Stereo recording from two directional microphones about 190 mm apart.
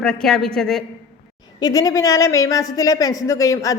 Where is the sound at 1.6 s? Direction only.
20° left (ahead or behind).